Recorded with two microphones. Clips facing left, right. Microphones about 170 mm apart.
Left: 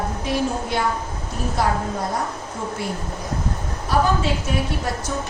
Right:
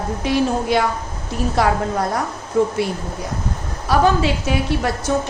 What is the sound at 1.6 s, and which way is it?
A woman's voice, 80° right.